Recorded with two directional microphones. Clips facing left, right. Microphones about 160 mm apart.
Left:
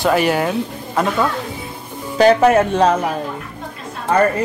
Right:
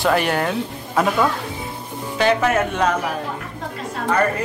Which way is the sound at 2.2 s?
35° left (ahead or behind).